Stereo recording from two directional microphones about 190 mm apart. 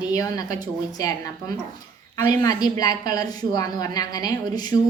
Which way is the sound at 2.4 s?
20° left (ahead or behind).